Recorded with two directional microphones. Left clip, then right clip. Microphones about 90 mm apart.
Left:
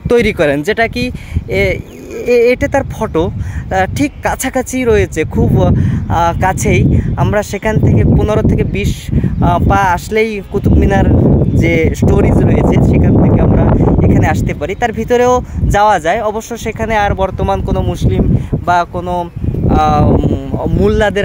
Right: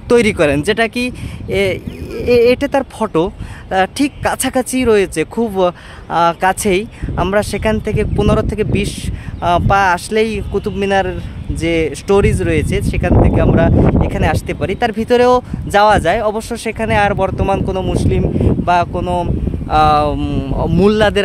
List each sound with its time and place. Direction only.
0.1 s speech: 20° right (ahead or behind)
2.2 s speech: 20° right (ahead or behind)
19.7 s speech: 20° right (ahead or behind)